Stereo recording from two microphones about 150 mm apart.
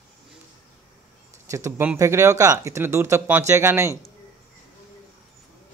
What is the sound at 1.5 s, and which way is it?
Speech, 20° right (ahead or behind).